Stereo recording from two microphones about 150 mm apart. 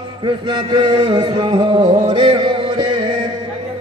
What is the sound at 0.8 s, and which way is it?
Music, 30° right (ahead or behind).